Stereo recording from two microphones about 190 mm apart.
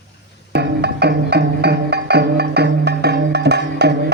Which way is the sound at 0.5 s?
60° right (ahead or behind).